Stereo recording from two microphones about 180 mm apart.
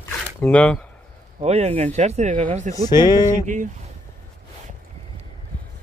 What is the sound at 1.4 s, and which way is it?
Speech, 35° right (ahead or behind).